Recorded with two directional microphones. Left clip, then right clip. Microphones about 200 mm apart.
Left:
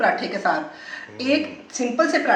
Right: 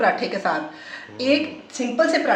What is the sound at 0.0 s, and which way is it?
Speech, 25° right (ahead or behind).